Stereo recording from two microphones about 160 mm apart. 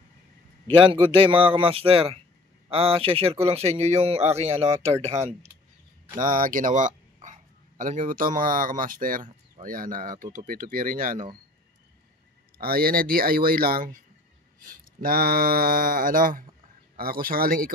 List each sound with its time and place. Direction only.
0.7 s speech: 35° right (ahead or behind)
6.1 s speech: 60° right (ahead or behind)
12.5 s speech: 70° right (ahead or behind)